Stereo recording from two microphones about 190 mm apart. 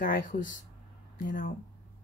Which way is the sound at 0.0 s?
45° left (ahead or behind).